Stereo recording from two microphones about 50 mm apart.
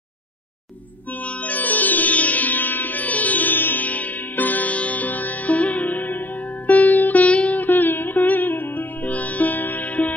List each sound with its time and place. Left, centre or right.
1.2 s sitar: left
6.7 s music: left